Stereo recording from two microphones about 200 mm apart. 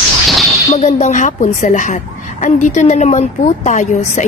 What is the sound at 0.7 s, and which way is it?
A woman's voice, 35° left (ahead or behind).